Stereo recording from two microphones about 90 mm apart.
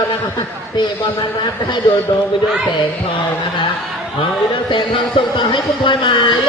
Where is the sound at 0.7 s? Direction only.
55° left (ahead or behind).